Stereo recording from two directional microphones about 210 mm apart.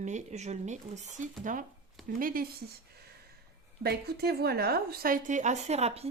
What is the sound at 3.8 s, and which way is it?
A woman's voice, 50° right (ahead or behind).